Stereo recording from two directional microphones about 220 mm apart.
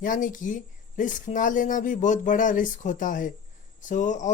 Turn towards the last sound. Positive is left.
turn(degrees=35)  # may be behind; listen again after turning